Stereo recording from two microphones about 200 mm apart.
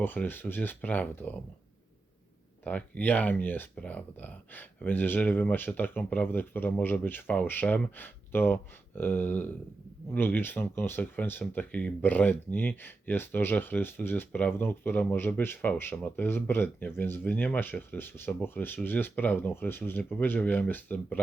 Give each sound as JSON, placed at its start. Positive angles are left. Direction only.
{"t": 0.0, "sound": "speech", "side_deg": 10}
{"t": 2.6, "sound": "speech", "side_deg": 5}